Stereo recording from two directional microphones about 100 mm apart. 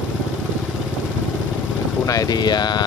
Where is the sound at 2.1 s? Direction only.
40° left (ahead or behind).